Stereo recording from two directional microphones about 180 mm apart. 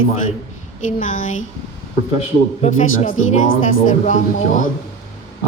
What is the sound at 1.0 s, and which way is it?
Speech, 45° left (ahead or behind).